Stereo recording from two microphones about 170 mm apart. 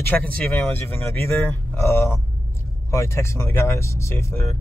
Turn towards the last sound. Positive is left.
turn(degrees=15)  # may be behind; listen again after turning